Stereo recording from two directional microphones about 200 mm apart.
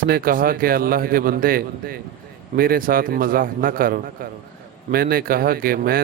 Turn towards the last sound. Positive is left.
turn(degrees=-45)  # may be behind; listen again after turning